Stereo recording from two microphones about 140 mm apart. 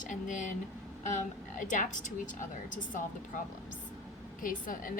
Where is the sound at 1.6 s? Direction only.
65° left (ahead or behind).